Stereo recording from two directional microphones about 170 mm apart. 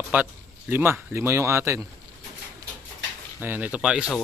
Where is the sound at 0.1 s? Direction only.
10° right (ahead or behind).